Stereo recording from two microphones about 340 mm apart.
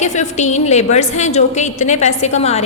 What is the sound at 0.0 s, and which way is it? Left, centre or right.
A woman's voice, left.